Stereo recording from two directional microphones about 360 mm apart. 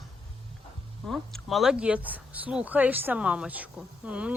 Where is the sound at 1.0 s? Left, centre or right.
Centre.